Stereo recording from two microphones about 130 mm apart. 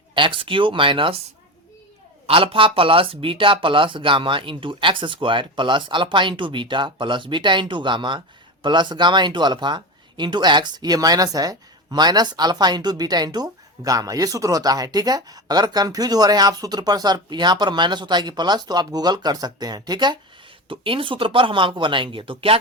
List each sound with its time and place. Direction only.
0.1 s speech: 40° right (ahead or behind)
2.2 s speech: 45° right (ahead or behind)